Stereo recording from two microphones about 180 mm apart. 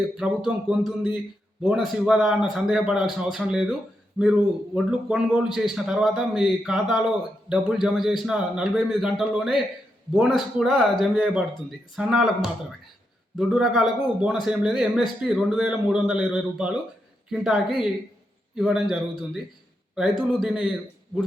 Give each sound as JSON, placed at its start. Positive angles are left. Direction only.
{"t": 0.2, "sound": "a man's voice", "side_deg": -5}
{"t": 20.0, "sound": "a man's voice", "side_deg": 0}